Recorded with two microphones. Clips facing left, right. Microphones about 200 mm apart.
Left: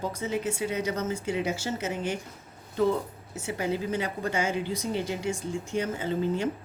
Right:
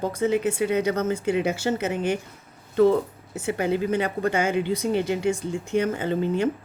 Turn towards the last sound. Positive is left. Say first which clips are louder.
# right 4 dB
turn(degrees=-60)  # may be behind; listen again after turning